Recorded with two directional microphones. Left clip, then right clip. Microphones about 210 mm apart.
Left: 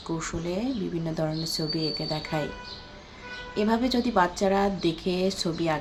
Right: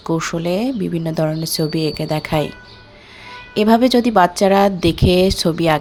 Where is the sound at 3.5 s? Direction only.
40° right (ahead or behind).